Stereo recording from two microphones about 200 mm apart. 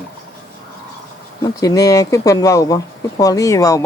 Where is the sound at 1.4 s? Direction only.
15° left (ahead or behind).